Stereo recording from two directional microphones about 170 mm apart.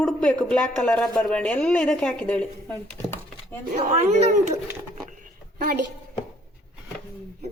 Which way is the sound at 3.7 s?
40° right (ahead or behind).